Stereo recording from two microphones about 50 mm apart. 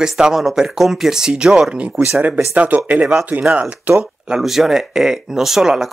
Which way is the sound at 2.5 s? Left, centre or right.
Right.